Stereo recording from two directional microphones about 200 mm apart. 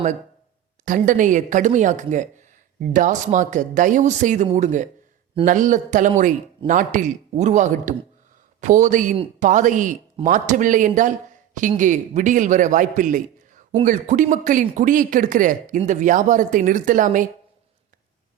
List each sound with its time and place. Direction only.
0.9 s speech: 40° right (ahead or behind)